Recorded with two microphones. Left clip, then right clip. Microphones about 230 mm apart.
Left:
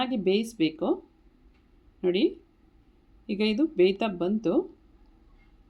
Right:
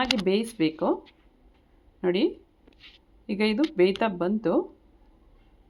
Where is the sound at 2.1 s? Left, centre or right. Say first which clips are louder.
Even; right.